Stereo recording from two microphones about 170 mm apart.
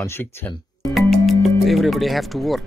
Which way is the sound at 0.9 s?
Centre (ahead or behind).